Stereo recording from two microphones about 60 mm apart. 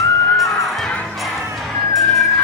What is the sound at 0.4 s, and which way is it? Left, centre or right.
Music, centre.